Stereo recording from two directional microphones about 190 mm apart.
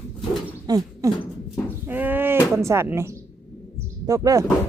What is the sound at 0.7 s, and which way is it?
Speech, 20° right (ahead or behind).